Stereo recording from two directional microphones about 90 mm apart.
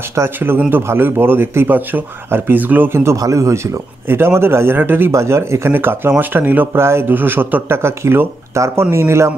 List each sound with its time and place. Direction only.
0.1 s a man's voice: 30° right (ahead or behind)